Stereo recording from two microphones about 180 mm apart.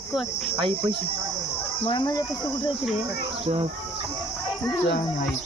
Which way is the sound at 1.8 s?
25° left (ahead or behind).